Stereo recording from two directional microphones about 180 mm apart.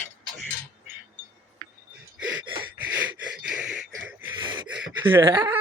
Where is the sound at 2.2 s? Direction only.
10° right (ahead or behind).